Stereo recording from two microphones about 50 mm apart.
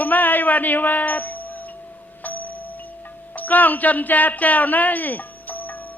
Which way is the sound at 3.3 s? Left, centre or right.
Left.